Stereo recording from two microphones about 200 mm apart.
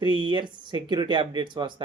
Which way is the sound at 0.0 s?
25° right (ahead or behind).